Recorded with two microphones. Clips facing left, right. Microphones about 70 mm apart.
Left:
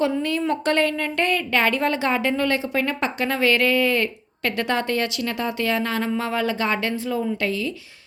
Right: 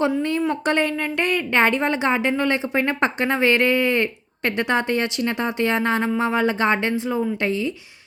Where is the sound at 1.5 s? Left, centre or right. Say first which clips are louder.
Right 2 dB; right.